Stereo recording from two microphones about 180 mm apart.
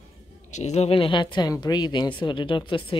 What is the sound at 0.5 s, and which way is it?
A woman's voice, 40° left (ahead or behind).